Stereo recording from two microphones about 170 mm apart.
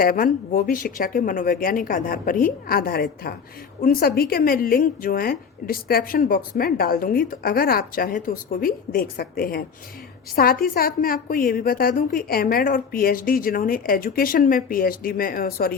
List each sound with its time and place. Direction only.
0.0 s a woman's voice: 55° left (ahead or behind)